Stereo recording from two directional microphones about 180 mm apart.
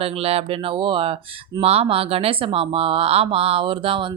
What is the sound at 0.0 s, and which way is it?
Speech, 35° right (ahead or behind).